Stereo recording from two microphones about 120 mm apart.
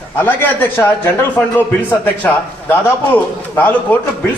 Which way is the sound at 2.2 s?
15° left (ahead or behind).